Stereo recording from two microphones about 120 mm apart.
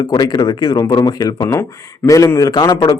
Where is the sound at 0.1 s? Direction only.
35° left (ahead or behind).